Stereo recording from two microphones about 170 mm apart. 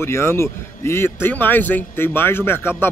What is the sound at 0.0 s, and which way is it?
Speech, 15° left (ahead or behind).